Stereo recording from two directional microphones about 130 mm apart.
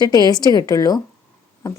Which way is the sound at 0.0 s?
30° left (ahead or behind).